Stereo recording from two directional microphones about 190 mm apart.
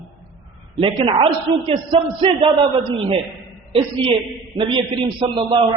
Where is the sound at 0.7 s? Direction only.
30° right (ahead or behind).